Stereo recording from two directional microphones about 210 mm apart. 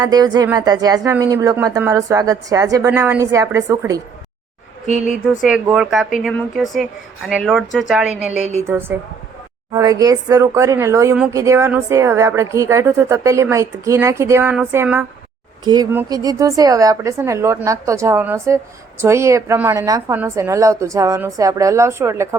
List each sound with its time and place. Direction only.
0.0 s a woman's voice: 20° right (ahead or behind)
4.9 s speech: 35° left (ahead or behind)
5.4 s a woman's voice: centre (ahead or behind)